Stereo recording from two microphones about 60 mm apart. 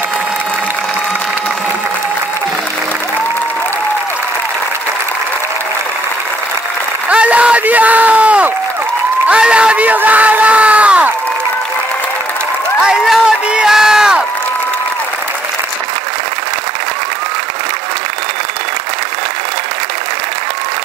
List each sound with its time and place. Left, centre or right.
7.1 s a sound: centre
9.3 s crowd: centre
12.8 s crowd: centre